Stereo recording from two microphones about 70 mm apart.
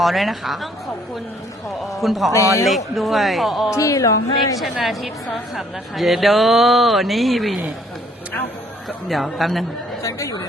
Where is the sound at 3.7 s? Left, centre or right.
Left.